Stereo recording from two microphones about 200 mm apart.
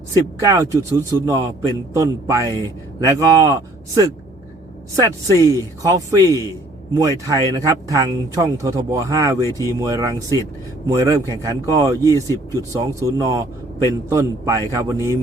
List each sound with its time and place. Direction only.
0.3 s a man's voice: 15° right (ahead or behind)